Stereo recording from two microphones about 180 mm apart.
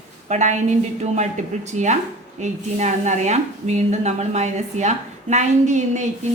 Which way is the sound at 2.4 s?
40° right (ahead or behind).